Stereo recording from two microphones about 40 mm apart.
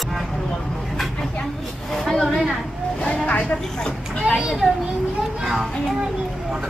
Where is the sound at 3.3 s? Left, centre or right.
Left.